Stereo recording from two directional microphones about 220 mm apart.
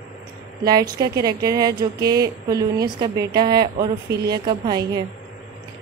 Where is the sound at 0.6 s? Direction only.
15° right (ahead or behind).